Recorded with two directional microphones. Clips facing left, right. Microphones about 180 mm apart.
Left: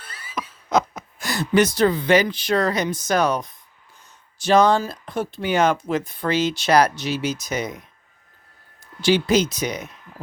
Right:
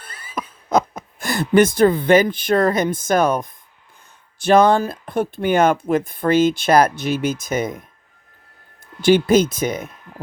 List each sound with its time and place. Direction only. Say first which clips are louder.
0.0 s speech: right 2 dB; 55° right (ahead or behind)